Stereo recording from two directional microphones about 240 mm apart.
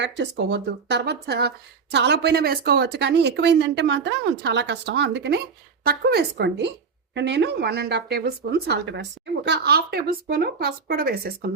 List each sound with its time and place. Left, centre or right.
0.0 s speech: right